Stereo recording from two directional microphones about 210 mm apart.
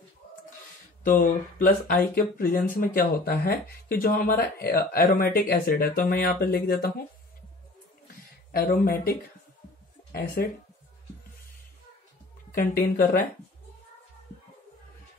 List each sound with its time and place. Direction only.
1.0 s speech: 40° left (ahead or behind)
8.5 s speech: 45° left (ahead or behind)
10.1 s speech: 45° left (ahead or behind)
12.4 s speech: 45° left (ahead or behind)